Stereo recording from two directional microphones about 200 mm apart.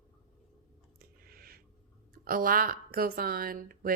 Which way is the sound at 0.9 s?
50° right (ahead or behind).